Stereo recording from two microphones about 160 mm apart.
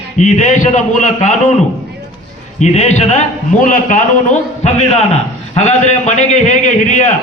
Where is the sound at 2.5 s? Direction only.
45° left (ahead or behind).